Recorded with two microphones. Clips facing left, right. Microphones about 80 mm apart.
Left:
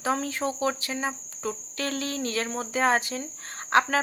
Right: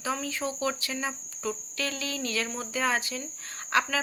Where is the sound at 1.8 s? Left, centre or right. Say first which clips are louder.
Left 3 dB; left.